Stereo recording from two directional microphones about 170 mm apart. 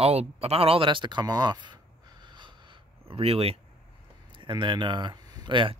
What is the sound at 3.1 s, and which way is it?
Speech, 35° right (ahead or behind).